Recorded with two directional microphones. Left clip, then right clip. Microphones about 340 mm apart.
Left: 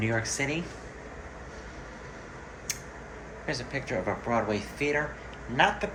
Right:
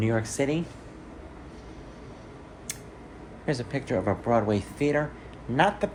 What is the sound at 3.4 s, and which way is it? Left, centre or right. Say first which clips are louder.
Speech: right 3 dB; right.